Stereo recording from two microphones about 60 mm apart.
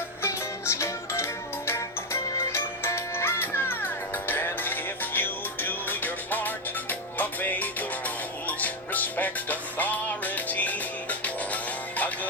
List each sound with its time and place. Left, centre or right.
0.2 s music: left